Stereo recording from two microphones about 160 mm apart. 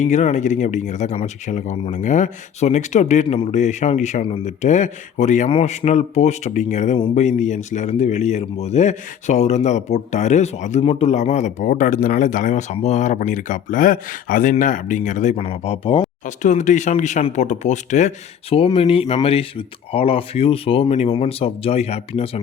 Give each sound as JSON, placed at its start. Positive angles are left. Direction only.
{"t": 0.0, "sound": "a man's voice", "side_deg": 45}
{"t": 5.5, "sound": "a man's voice", "side_deg": 40}
{"t": 16.2, "sound": "a man's voice", "side_deg": 50}
{"t": 18.5, "sound": "speech", "side_deg": 35}